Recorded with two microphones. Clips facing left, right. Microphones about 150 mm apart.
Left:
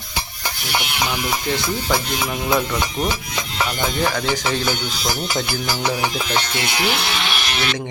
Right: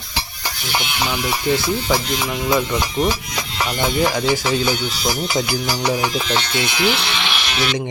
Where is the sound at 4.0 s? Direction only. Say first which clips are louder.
Right 4 dB; 10° right (ahead or behind).